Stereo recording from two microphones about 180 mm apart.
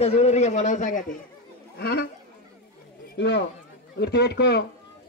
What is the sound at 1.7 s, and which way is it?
Speech, 60° left (ahead or behind).